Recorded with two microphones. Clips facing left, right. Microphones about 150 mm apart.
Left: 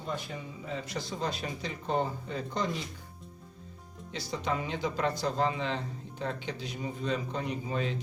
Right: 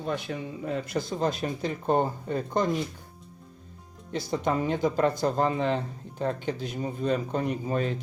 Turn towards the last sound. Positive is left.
turn(degrees=-50)  # may be behind; listen again after turning